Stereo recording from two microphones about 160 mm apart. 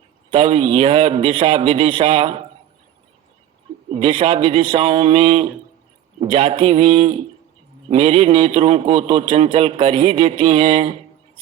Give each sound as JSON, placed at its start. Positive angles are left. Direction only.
{"t": 0.3, "sound": "a man's voice", "side_deg": -45}
{"t": 3.8, "sound": "speech", "side_deg": -40}
{"t": 4.4, "sound": "a man's voice", "side_deg": -45}